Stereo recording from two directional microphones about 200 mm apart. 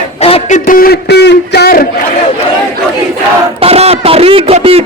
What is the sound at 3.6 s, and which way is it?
Speech, 30° right (ahead or behind).